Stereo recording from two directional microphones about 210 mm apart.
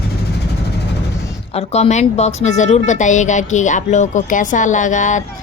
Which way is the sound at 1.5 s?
30° left (ahead or behind).